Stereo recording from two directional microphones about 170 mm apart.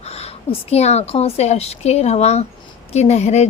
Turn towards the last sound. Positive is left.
turn(degrees=40)  # may be behind; listen again after turning